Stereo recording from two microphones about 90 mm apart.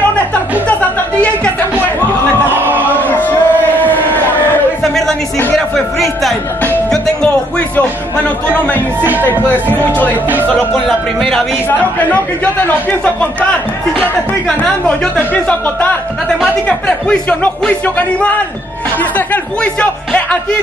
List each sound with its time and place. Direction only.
2.6 s a sound: 20° right (ahead or behind)
3.0 s a sound: 20° left (ahead or behind)
6.9 s music: 10° left (ahead or behind)
10.7 s speech: centre (ahead or behind)
12.1 s speech: 15° left (ahead or behind)
16.6 s speech: 10° left (ahead or behind)